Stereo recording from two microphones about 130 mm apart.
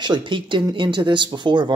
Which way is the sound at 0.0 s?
35° right (ahead or behind).